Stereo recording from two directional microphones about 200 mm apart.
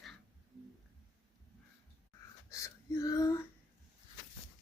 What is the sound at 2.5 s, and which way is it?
Speech, 15° left (ahead or behind).